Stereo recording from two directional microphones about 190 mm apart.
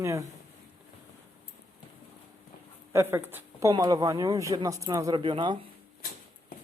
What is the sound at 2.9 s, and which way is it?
Speech, 10° right (ahead or behind).